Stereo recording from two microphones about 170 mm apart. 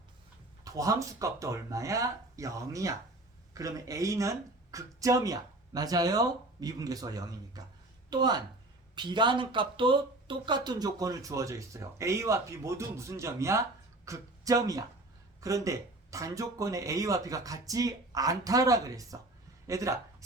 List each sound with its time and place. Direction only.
0.6 s speech: 20° right (ahead or behind)